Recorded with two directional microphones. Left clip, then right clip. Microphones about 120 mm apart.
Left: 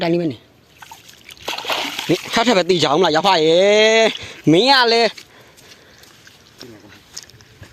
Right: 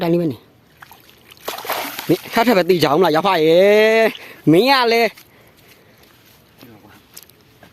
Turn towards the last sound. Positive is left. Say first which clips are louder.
# left 7 dB
turn(degrees=-15)  # may be behind; listen again after turning